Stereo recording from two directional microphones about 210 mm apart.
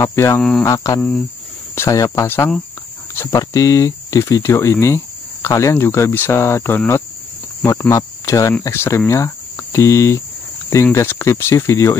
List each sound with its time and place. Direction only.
0.0 s speech: 10° left (ahead or behind)
0.4 s speech: centre (ahead or behind)
0.7 s speech: 15° left (ahead or behind)